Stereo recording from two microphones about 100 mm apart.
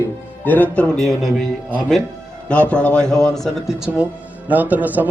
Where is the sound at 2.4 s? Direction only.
15° left (ahead or behind); by 4.0 s 5° right (ahead or behind).